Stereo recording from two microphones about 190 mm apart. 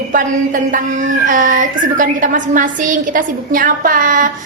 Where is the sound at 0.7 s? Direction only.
45° right (ahead or behind).